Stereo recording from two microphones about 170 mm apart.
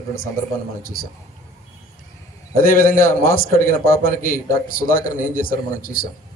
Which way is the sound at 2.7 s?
55° left (ahead or behind).